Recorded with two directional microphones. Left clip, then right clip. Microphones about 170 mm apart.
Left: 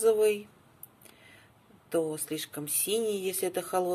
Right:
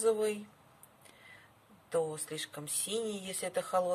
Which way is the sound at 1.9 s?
20° left (ahead or behind).